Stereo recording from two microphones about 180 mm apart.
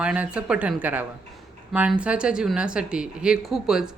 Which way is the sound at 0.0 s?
5° right (ahead or behind).